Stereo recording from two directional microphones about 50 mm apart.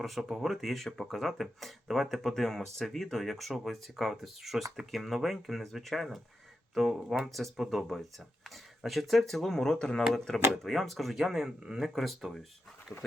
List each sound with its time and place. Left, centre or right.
0.0 s speech: centre
10.5 s speech: centre
11.9 s speech: centre
12.9 s speech: left